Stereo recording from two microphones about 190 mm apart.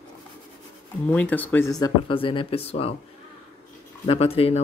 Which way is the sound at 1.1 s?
10° left (ahead or behind).